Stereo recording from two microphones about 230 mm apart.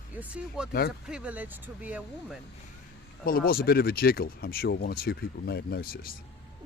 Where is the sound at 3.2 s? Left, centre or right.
Left.